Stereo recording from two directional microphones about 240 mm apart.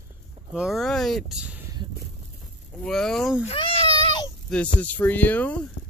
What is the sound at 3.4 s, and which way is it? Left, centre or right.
Speech, left.